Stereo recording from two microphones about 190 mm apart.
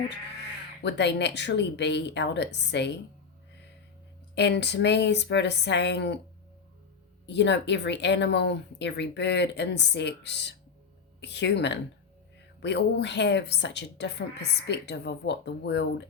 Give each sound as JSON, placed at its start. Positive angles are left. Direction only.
{"t": 0.8, "sound": "speech", "side_deg": 65}
{"t": 4.4, "sound": "speech", "side_deg": 65}
{"t": 7.3, "sound": "a woman's voice", "side_deg": 65}